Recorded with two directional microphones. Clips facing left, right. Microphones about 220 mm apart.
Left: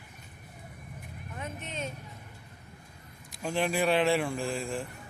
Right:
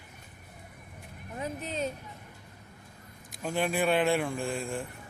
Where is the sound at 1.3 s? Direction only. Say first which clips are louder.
Right 5 dB; 35° right (ahead or behind).